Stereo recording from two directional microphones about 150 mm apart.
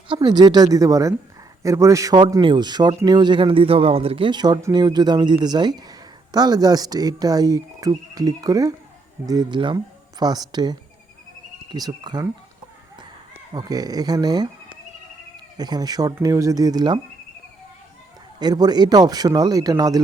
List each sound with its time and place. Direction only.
0.1 s a man's voice: 30° right (ahead or behind)
13.5 s a man's voice: 25° right (ahead or behind)
15.5 s a man's voice: 25° right (ahead or behind)
18.3 s a man's voice: 25° right (ahead or behind)